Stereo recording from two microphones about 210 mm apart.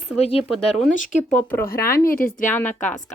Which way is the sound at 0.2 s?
25° left (ahead or behind).